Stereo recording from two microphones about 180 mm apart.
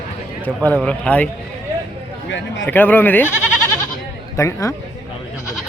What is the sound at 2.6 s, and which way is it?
Speech, 10° left (ahead or behind).